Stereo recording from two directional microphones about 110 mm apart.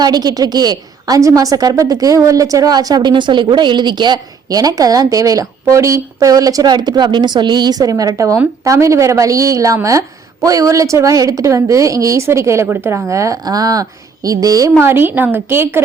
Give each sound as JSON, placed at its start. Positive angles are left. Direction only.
{"t": 0.0, "sound": "a woman's voice", "side_deg": -40}